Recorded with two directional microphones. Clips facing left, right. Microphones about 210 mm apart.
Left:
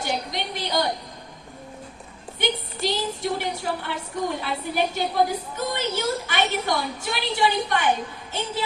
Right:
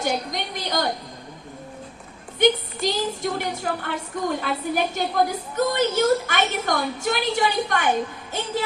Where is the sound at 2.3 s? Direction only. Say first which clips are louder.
Right 8 dB; 45° right (ahead or behind).